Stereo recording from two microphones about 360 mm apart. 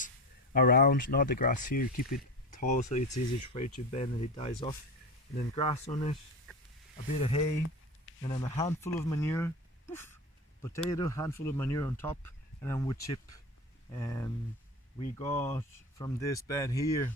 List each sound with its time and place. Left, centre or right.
0.5 s speech: left
7.2 s speech: centre
15.3 s speech: centre